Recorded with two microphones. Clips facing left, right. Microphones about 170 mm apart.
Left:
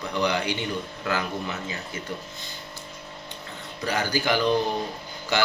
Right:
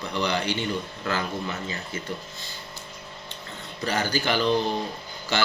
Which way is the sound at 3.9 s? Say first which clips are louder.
Even; 15° left (ahead or behind).